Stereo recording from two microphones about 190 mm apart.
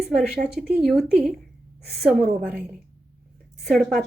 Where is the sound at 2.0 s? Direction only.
Centre (ahead or behind).